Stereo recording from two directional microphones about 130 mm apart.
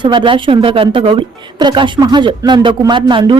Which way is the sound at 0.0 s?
40° right (ahead or behind).